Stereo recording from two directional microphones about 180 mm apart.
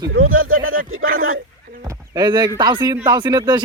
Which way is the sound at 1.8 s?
20° right (ahead or behind).